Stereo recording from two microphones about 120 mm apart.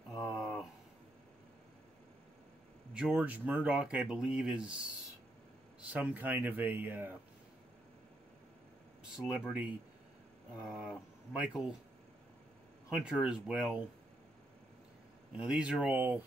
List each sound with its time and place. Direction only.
0.1 s a sound: 5° right (ahead or behind)
2.9 s speech: 10° right (ahead or behind)
5.9 s speech: 10° right (ahead or behind)
9.1 s speech: 5° right (ahead or behind)
12.9 s speech: 5° right (ahead or behind)
15.3 s speech: 5° right (ahead or behind)